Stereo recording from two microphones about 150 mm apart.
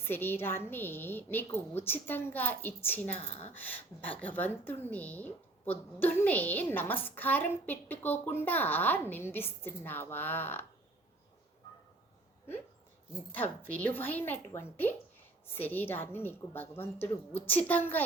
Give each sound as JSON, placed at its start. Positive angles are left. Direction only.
{"t": 0.0, "sound": "a woman's voice", "side_deg": 15}
{"t": 3.2, "sound": "speech", "side_deg": 45}
{"t": 3.5, "sound": "a woman's voice", "side_deg": 10}
{"t": 13.3, "sound": "a woman's voice", "side_deg": 10}